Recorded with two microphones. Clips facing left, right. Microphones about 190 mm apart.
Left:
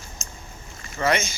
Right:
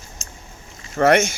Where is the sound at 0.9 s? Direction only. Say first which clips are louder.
Right 8 dB; 65° right (ahead or behind).